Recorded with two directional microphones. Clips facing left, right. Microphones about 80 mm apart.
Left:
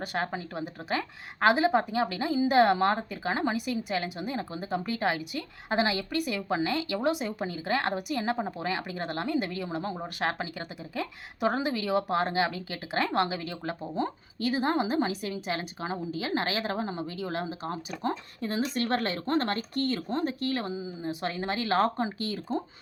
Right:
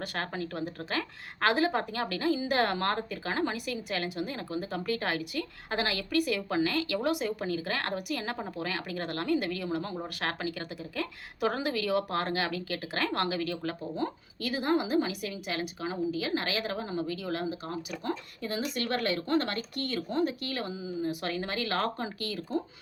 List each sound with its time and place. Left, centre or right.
0.0 s a woman's voice: centre